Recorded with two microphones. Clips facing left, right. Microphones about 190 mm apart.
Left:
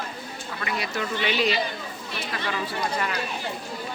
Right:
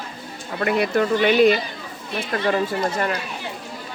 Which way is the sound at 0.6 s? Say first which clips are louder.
Right 11 dB; 55° right (ahead or behind).